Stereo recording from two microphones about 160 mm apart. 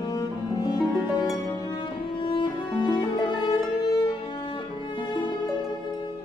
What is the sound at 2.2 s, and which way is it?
Cello, 30° left (ahead or behind).